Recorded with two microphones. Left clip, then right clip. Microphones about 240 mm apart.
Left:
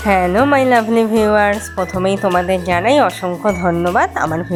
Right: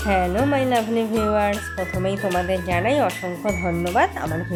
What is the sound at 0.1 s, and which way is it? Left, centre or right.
Speech, centre.